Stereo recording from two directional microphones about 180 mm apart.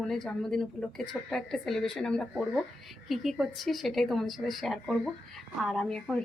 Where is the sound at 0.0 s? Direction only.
Centre (ahead or behind).